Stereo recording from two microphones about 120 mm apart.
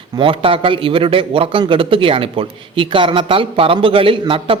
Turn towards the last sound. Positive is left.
turn(degrees=-50)  # may be behind; listen again after turning